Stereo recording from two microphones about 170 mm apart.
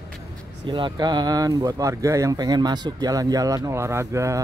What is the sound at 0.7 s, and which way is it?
Speech, 30° right (ahead or behind).